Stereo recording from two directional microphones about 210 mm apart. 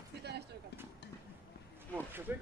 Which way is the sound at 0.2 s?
50° right (ahead or behind).